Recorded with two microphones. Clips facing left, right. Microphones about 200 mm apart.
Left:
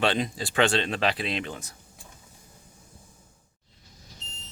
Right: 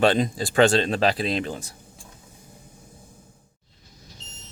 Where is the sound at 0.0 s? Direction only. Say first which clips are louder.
Right 6 dB; 40° right (ahead or behind).